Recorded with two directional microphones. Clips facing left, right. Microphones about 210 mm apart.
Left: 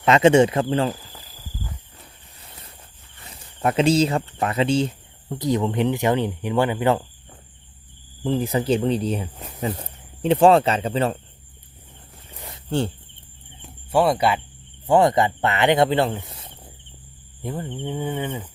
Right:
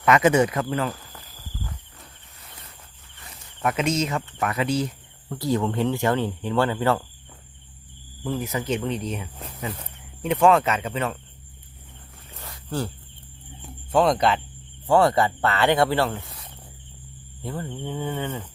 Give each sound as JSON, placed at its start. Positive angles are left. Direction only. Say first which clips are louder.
{"t": 0.0, "sound": "speech", "louder": "left 4 dB", "side_deg": 25}
{"t": 3.2, "sound": "speech", "louder": "left 3 dB", "side_deg": 30}
{"t": 8.2, "sound": "speech", "louder": "left 5 dB", "side_deg": 30}
{"t": 12.3, "sound": "a sound", "louder": "left 2 dB", "side_deg": 15}
{"t": 13.9, "sound": "livestock", "louder": "left 1 dB", "side_deg": 10}
{"t": 14.8, "sound": "speech", "louder": "left 2 dB", "side_deg": 15}
{"t": 17.4, "sound": "livestock", "louder": "left 2 dB", "side_deg": 15}